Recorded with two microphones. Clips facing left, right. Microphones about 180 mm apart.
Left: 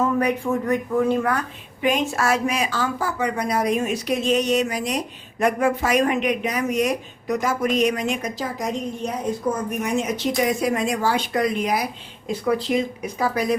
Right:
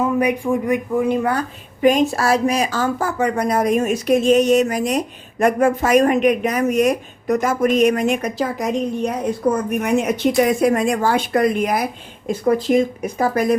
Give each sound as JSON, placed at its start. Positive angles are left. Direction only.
{"t": 0.0, "sound": "speech", "side_deg": -10}
{"t": 1.3, "sound": "a woman's voice", "side_deg": -35}